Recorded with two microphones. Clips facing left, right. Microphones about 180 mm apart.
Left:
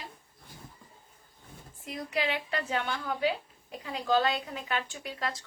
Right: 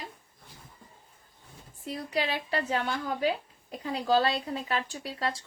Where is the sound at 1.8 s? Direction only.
35° right (ahead or behind).